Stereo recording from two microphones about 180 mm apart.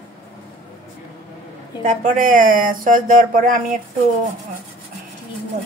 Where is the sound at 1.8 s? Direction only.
45° right (ahead or behind).